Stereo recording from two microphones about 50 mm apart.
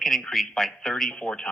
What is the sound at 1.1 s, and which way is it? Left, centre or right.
Speech, centre.